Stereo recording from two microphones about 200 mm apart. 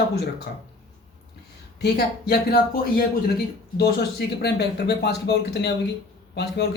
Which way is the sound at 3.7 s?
50° left (ahead or behind).